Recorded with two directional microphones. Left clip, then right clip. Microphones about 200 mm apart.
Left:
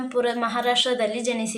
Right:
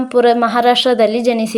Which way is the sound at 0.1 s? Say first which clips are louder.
Right 12 dB; 35° right (ahead or behind).